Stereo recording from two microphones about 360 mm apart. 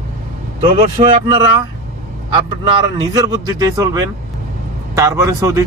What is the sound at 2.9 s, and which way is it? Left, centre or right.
Speech, centre.